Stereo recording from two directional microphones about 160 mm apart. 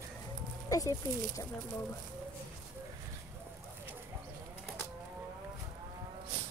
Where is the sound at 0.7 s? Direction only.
20° left (ahead or behind).